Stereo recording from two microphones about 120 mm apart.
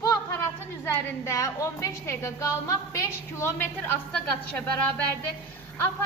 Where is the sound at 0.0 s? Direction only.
25° left (ahead or behind).